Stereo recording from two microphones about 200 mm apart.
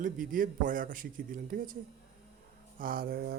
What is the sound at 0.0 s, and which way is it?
Speech, 45° right (ahead or behind).